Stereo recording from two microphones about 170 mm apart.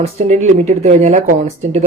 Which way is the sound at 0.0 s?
40° right (ahead or behind).